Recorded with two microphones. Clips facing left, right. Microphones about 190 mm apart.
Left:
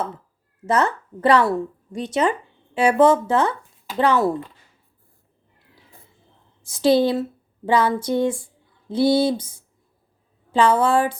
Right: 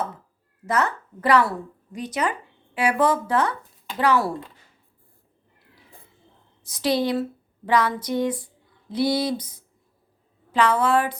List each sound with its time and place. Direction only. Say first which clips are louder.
0.6 s a woman's voice: left 4 dB; 25° left (ahead or behind)
6.7 s a woman's voice: left 6 dB; 25° left (ahead or behind)